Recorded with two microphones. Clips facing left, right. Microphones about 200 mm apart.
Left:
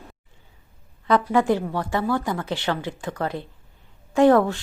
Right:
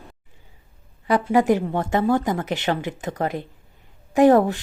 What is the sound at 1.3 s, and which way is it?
A woman's voice, 15° right (ahead or behind).